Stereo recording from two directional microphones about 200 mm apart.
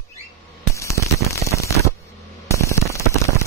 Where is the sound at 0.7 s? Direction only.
15° left (ahead or behind).